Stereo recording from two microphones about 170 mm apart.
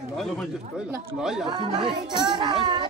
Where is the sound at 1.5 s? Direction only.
25° right (ahead or behind).